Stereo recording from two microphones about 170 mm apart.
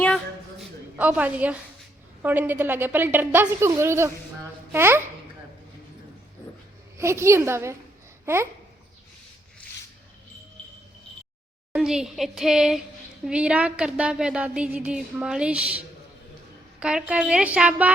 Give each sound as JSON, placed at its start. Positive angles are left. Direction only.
{"t": 0.9, "sound": "a woman's voice", "side_deg": -10}
{"t": 6.9, "sound": "a woman's voice", "side_deg": -15}
{"t": 8.2, "sound": "babbling", "side_deg": -15}
{"t": 11.7, "sound": "a woman's voice", "side_deg": -5}
{"t": 16.8, "sound": "a woman's voice", "side_deg": -5}